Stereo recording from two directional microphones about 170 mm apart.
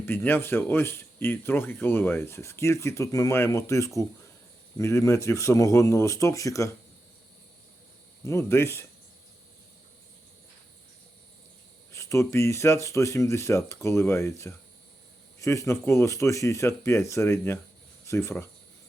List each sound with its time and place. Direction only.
0.0 s speech: 15° left (ahead or behind)
8.2 s speech: 15° left (ahead or behind)
11.9 s speech: 15° left (ahead or behind)